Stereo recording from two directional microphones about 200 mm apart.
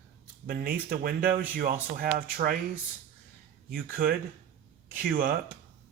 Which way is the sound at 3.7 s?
45° right (ahead or behind).